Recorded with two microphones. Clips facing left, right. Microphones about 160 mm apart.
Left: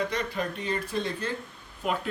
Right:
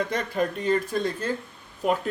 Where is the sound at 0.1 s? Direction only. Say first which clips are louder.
Right 4 dB; 45° right (ahead or behind).